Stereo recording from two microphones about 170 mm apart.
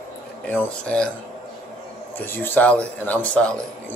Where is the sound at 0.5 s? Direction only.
10° left (ahead or behind).